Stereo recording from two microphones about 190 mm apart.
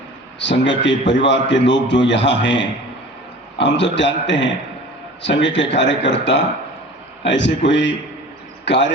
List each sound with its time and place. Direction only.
0.3 s speech: 70° left (ahead or behind)